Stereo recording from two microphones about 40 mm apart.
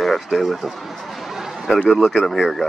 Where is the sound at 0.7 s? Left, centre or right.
Centre.